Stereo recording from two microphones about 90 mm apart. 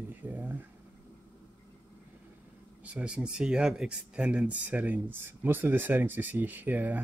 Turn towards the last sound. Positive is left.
turn(degrees=-20)  # may be behind; listen again after turning